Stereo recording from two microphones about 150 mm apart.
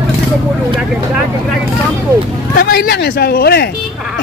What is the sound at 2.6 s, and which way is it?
Speech, 85° left.